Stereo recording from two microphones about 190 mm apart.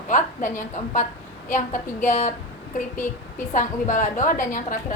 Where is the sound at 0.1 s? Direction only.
40° left (ahead or behind).